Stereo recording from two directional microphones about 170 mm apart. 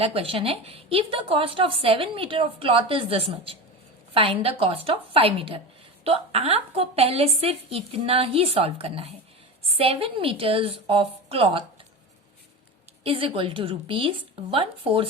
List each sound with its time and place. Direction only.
0.0 s a woman's voice: 35° right (ahead or behind)
13.1 s a woman's voice: 30° right (ahead or behind)